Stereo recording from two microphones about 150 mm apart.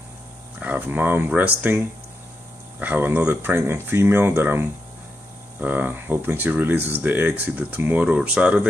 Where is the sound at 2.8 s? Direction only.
10° right (ahead or behind).